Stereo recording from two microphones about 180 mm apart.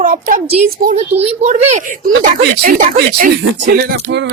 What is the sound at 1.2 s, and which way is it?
Speech, 35° right (ahead or behind).